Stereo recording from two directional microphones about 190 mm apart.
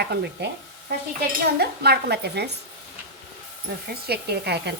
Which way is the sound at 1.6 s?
60° right (ahead or behind).